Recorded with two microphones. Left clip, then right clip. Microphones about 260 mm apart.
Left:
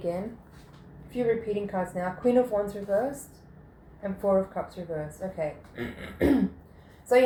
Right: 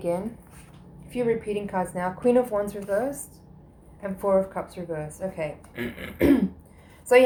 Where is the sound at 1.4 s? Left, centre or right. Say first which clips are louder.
Right 2 dB; right.